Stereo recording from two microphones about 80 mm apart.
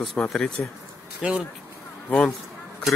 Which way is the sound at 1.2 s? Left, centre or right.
Centre.